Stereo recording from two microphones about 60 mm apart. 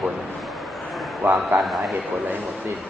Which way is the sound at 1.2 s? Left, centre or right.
Right.